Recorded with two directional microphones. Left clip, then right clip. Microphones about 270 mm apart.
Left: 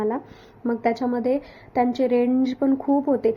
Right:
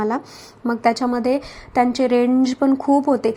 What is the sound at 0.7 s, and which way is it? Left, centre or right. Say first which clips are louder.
A woman's voice: right 5 dB; centre.